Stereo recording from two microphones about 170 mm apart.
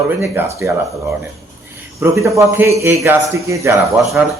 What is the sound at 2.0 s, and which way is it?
A man's voice, 15° right (ahead or behind).